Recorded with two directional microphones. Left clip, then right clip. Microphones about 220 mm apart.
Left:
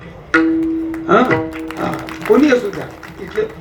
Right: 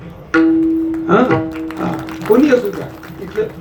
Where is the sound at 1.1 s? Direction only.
20° left (ahead or behind).